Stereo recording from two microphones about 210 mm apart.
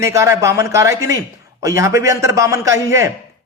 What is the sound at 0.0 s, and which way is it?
Speech, 15° right (ahead or behind).